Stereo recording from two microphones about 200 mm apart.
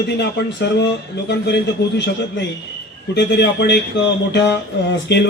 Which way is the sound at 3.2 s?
55° left (ahead or behind).